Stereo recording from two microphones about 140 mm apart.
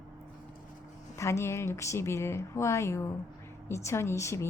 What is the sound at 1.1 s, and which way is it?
A woman's voice, 20° left (ahead or behind).